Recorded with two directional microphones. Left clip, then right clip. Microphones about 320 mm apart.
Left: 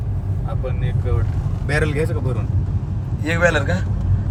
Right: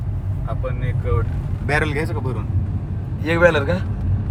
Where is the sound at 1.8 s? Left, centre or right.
Centre.